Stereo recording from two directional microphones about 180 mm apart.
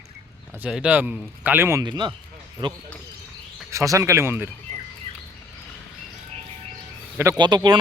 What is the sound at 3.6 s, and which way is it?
Speech, 15° right (ahead or behind).